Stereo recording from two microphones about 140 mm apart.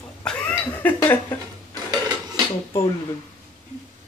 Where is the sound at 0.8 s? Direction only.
15° left (ahead or behind).